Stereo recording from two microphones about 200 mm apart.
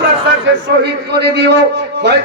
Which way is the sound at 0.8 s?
55° right (ahead or behind).